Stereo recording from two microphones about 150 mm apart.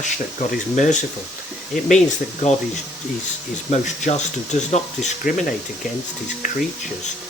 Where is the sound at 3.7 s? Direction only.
50° left (ahead or behind).